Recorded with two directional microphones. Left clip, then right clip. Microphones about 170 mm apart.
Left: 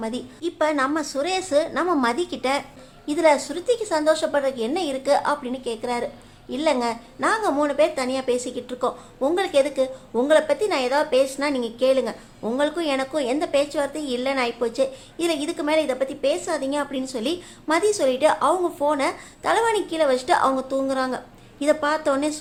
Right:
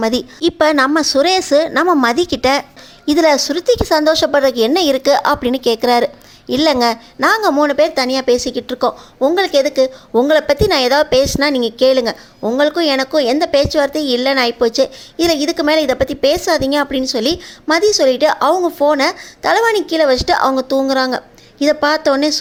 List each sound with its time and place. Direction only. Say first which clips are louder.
0.0 s a woman's voice: right 13 dB; 45° right (ahead or behind)